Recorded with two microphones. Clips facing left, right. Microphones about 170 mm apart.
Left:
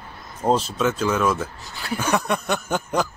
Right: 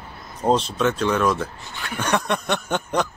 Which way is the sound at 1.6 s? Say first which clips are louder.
Left 4 dB; 35° left (ahead or behind).